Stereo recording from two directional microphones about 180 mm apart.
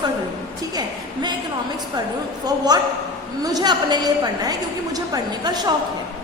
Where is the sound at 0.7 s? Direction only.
25° right (ahead or behind).